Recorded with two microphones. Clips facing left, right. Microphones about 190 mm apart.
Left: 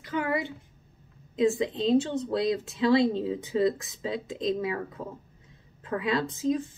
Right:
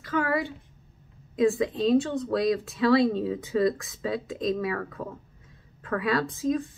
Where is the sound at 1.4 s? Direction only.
20° left (ahead or behind).